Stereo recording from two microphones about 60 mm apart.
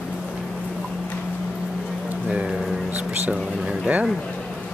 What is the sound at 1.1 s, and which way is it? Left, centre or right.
Music, centre.